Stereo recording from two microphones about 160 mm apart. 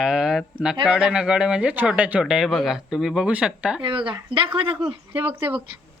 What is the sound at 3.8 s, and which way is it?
Speech, 30° right (ahead or behind).